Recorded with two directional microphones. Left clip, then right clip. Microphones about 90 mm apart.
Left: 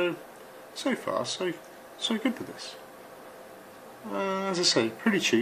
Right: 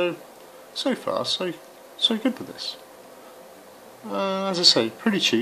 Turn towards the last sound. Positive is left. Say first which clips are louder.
# right 3 dB
turn(degrees=-15)  # may be behind; listen again after turning